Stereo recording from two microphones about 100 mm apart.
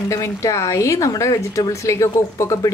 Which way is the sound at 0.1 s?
35° left (ahead or behind).